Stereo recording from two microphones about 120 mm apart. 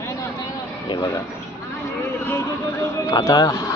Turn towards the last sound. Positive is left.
turn(degrees=25)  # may be behind; listen again after turning